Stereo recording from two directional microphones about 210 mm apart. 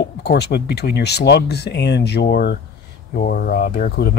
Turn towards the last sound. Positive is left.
turn(degrees=50)  # may be behind; listen again after turning